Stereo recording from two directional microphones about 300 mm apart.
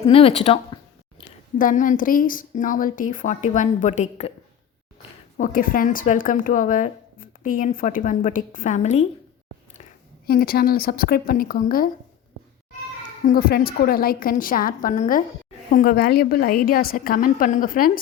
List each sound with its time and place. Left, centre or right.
0.0 s a woman's voice: centre
5.4 s a woman's voice: left
10.2 s a woman's voice: left
13.2 s a woman's voice: left